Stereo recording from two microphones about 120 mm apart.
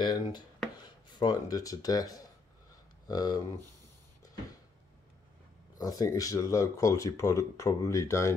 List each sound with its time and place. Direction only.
0.0 s speech: 40° left (ahead or behind)
5.8 s speech: 30° left (ahead or behind)